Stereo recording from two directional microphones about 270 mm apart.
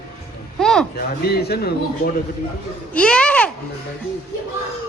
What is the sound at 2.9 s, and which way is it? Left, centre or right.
Speech, centre.